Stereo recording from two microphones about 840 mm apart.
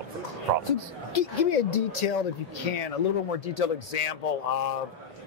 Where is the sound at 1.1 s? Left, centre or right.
Left.